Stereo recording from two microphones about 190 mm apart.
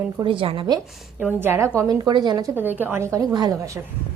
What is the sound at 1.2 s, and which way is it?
A woman's voice, 10° right (ahead or behind).